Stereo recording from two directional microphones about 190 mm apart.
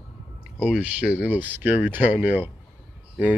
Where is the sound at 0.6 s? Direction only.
5° right (ahead or behind).